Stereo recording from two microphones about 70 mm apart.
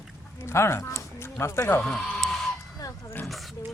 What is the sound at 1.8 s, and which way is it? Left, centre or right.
Speech, centre.